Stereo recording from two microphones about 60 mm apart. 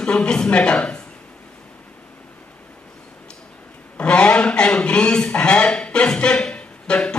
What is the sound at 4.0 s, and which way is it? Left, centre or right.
Speech, centre.